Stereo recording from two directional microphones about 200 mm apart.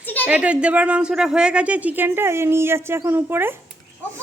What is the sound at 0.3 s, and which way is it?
A woman's voice, 5° right (ahead or behind).